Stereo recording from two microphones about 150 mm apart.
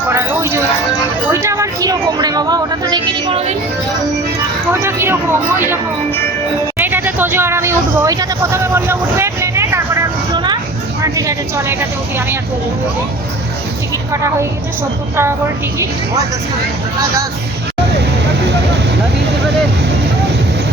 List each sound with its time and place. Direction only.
0.1 s music: 15° right (ahead or behind)
1.3 s speech: 20° right (ahead or behind)
4.7 s speech: 15° right (ahead or behind)
6.7 s vehicle: 15° right (ahead or behind)
10.3 s a sound: 30° right (ahead or behind)
11.0 s speech: 20° right (ahead or behind)
14.1 s speech: 20° right (ahead or behind)